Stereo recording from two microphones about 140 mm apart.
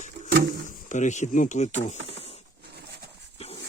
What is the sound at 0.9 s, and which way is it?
Speech, 60° left (ahead or behind).